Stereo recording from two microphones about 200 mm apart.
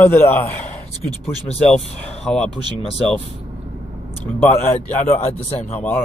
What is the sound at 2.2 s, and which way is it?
Speech, 5° left (ahead or behind).